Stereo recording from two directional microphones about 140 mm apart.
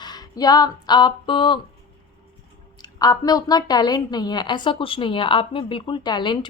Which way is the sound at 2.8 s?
25° left (ahead or behind).